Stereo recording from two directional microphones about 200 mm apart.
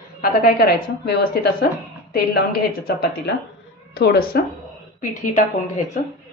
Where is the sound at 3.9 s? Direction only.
50° left (ahead or behind).